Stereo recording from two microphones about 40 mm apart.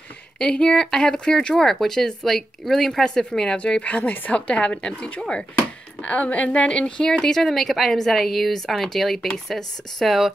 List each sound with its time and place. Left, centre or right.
0.4 s speech: centre
1.1 s speech: left
3.5 s a woman's voice: left
4.3 s speech: left
5.9 s a woman's voice: left
7.1 s speech: centre
7.4 s speech: centre
10.0 s speech: centre